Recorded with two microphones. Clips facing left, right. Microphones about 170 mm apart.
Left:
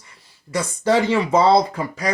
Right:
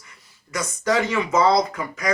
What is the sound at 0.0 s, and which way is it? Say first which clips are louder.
Speech: left 2 dB; 30° left (ahead or behind).